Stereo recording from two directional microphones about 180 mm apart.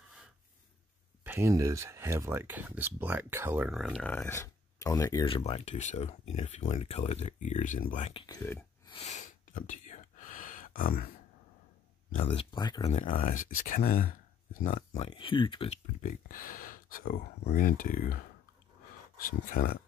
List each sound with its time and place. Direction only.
1.2 s speech: 15° right (ahead or behind)
3.8 s speech: 5° left (ahead or behind)
5.2 s speech: 30° left (ahead or behind)
8.1 s speech: 30° left (ahead or behind)
8.4 s speech: 10° left (ahead or behind)
8.8 s whispering: 35° left (ahead or behind); by 11.1 s 55° left (ahead or behind)
12.3 s speech: 25° left (ahead or behind)
12.8 s speech: 45° left (ahead or behind)
15.0 s speech: 25° left (ahead or behind)
16.0 s speech: 50° left (ahead or behind)
19.1 s speech: 50° left (ahead or behind)